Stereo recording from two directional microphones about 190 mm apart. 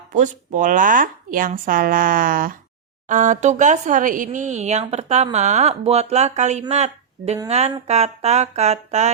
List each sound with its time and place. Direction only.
0.1 s speech: 40° right (ahead or behind)